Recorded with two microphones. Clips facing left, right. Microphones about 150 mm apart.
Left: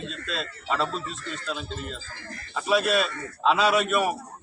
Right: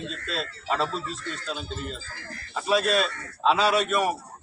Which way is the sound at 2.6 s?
Centre (ahead or behind).